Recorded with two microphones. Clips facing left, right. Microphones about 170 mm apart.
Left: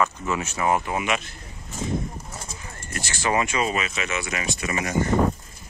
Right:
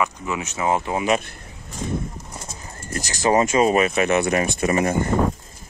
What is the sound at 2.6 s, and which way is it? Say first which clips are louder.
Speech: right 6 dB; 40° right (ahead or behind).